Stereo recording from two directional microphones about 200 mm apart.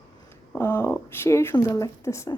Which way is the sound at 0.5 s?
10° left (ahead or behind).